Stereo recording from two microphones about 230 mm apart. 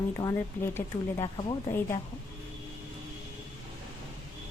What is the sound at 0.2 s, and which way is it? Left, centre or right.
Speech, centre.